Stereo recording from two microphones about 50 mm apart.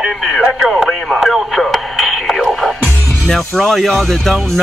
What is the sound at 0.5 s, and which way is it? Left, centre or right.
Speech, centre.